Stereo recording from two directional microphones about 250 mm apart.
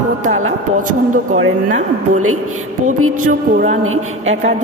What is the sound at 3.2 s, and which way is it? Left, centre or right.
Speech, right.